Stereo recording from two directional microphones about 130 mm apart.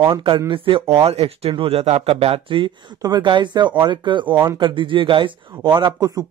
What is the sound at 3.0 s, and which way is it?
Speech, 30° right (ahead or behind).